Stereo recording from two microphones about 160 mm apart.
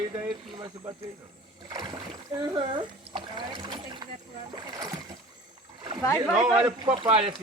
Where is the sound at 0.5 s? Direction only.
30° right (ahead or behind).